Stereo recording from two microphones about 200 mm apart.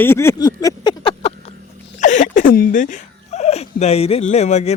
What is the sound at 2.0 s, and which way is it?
Dog, 40° left (ahead or behind).